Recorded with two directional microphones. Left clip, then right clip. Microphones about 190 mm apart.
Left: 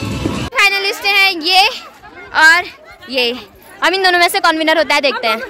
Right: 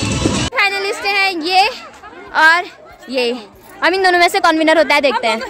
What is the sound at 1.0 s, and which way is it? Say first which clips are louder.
A woman's voice: left 4 dB; centre (ahead or behind).